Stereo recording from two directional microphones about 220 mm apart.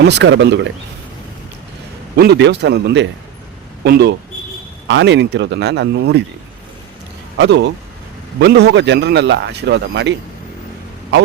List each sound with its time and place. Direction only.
0.0 s a man's voice: 55° right (ahead or behind)
2.1 s a man's voice: 50° right (ahead or behind)
7.3 s a man's voice: 55° right (ahead or behind)